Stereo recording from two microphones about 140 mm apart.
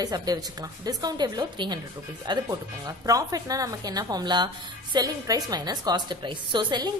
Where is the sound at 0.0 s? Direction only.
30° right (ahead or behind).